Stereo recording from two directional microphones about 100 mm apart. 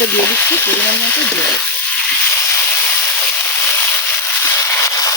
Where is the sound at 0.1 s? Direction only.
25° left (ahead or behind).